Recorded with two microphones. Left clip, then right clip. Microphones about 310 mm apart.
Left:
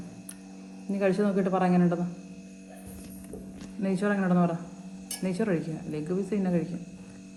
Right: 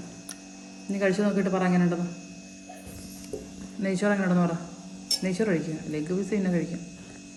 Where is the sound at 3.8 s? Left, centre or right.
Centre.